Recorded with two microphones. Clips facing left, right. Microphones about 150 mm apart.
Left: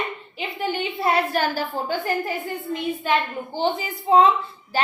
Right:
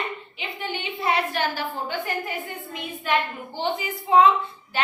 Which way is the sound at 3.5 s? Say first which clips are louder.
Left 3 dB; 30° left (ahead or behind).